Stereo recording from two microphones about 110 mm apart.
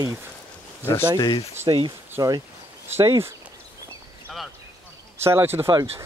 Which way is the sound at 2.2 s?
35° right (ahead or behind).